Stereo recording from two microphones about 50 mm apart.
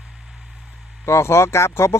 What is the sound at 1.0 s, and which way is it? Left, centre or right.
Speech, left.